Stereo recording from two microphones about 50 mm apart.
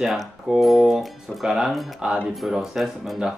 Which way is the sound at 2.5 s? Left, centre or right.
Centre.